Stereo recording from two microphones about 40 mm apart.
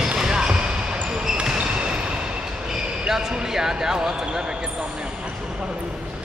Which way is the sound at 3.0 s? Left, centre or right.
Centre.